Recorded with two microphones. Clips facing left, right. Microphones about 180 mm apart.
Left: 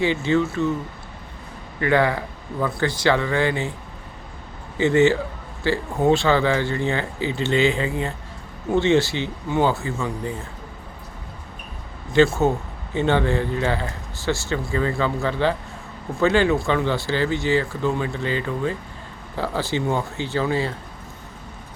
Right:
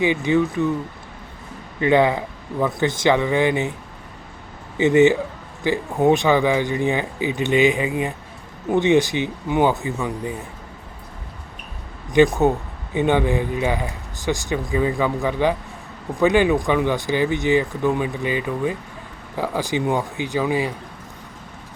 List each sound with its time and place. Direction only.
0.0 s a man's voice: 15° right (ahead or behind)
1.8 s speech: 20° right (ahead or behind)
4.8 s a man's voice: 20° right (ahead or behind)
12.1 s a man's voice: 15° right (ahead or behind)